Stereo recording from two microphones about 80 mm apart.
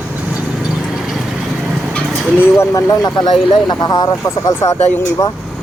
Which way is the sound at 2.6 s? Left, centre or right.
Left.